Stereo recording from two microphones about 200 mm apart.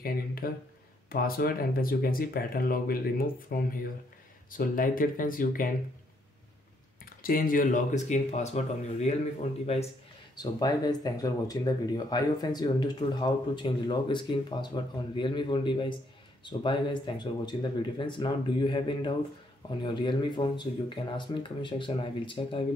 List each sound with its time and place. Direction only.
0.0 s speech: 50° left (ahead or behind)
7.1 s speech: 45° left (ahead or behind)
10.3 s speech: 20° left (ahead or behind)